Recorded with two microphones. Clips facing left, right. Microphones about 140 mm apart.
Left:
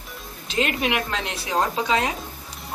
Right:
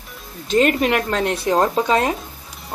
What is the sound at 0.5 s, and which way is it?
Speech, 45° right (ahead or behind).